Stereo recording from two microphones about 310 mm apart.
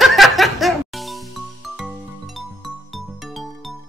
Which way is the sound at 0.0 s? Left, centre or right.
Centre.